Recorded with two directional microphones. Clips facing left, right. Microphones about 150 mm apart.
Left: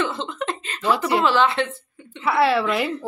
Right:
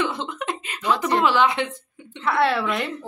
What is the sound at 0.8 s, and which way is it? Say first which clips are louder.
Speech: left 1 dB; 10° left (ahead or behind).